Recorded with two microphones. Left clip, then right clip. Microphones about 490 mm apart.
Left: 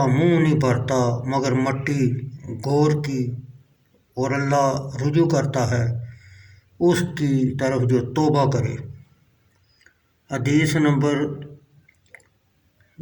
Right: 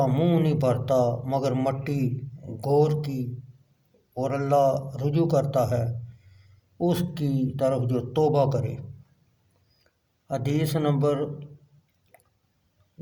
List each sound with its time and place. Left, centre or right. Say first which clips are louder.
0.0 s a man's voice: left 5 dB; right
10.2 s a man's voice: left 7 dB; right